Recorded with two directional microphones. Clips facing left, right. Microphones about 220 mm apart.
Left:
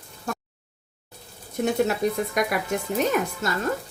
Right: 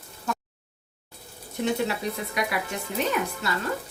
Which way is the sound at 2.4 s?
45° left (ahead or behind).